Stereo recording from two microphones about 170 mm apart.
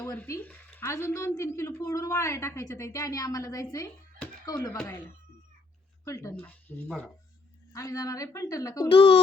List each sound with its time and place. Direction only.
0.0 s a woman's voice: 15° left (ahead or behind)
6.1 s speech: 15° left (ahead or behind)
7.7 s a woman's voice: 20° left (ahead or behind)
8.9 s speech: 35° left (ahead or behind)